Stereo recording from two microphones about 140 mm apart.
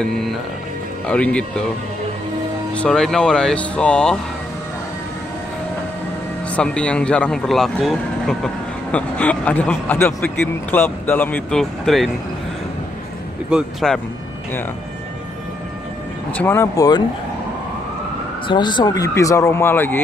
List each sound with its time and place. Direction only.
0.0 s a man's voice: 5° left (ahead or behind)
2.7 s speech: 5° left (ahead or behind)
6.5 s a man's voice: 5° left (ahead or behind)
13.5 s speech: 5° right (ahead or behind)
16.3 s speech: 15° left (ahead or behind)
18.5 s speech: 35° left (ahead or behind); by 20.0 s 15° left (ahead or behind)